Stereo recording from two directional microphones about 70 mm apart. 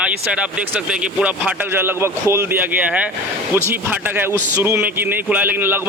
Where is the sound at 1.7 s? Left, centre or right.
Right.